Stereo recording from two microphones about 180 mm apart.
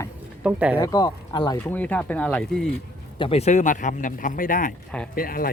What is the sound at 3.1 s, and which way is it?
Speech, 30° left (ahead or behind).